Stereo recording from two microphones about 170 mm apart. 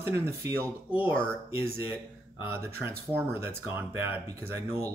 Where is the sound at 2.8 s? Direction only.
15° right (ahead or behind).